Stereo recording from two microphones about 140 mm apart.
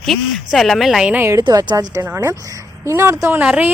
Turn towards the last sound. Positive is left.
turn(degrees=-10)  # may be behind; listen again after turning